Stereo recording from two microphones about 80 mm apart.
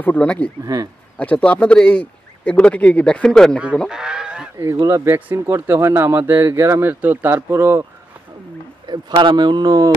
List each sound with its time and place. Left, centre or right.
0.0 s speech: centre
3.9 s goose: centre
4.8 s speech: right
5.1 s speech: right
8.8 s speech: right